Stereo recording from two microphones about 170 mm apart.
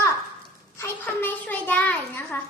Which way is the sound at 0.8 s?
10° left (ahead or behind).